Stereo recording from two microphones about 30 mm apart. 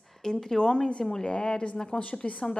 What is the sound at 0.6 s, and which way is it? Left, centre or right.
A woman's voice, left.